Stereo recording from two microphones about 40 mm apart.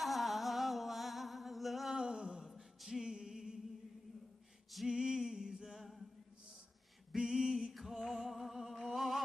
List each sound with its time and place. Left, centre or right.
0.0 s humming: centre
2.0 s a sound: centre
2.9 s music: centre
4.8 s music: centre
7.2 s music: centre
8.8 s a sound: centre